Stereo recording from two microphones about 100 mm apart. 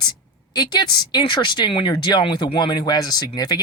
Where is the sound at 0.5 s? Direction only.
45° left (ahead or behind).